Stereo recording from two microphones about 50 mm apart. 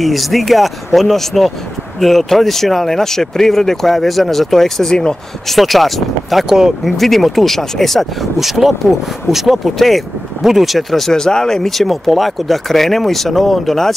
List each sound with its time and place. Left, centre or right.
0.0 s speech: centre
5.5 s speech: centre
6.5 s speech: centre
7.0 s speech: centre